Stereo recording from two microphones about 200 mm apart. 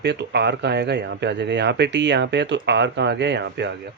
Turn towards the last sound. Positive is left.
turn(degrees=-60)  # may be behind; listen again after turning